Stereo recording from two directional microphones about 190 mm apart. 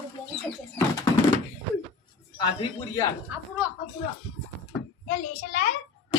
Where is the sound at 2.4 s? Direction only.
20° left (ahead or behind).